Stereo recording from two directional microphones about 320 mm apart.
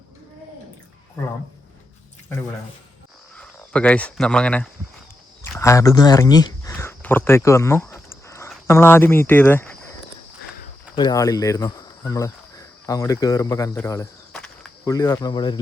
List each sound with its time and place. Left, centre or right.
3.3 s speech: centre
5.4 s a sound: centre
10.9 s speech: centre